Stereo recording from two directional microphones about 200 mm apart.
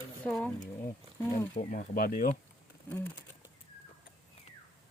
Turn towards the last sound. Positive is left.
turn(degrees=10)  # may be behind; listen again after turning